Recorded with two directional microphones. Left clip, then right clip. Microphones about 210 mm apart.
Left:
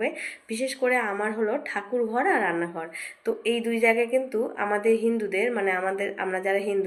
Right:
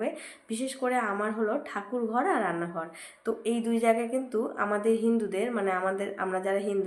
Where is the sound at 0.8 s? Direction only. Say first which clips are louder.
Left 3 dB; 5° right (ahead or behind).